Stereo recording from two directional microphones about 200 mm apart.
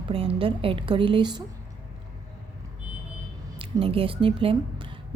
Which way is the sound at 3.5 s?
25° right (ahead or behind).